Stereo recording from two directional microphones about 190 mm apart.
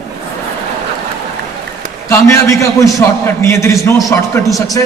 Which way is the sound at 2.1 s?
15° left (ahead or behind).